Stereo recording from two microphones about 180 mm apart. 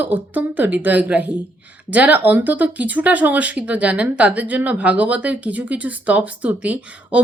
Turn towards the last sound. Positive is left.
turn(degrees=-5)  # may be behind; listen again after turning